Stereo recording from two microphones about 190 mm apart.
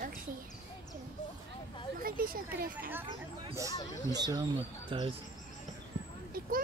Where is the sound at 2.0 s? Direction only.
50° right (ahead or behind).